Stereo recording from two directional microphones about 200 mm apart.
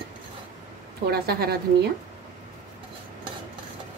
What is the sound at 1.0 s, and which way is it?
Cutlery, 50° right (ahead or behind).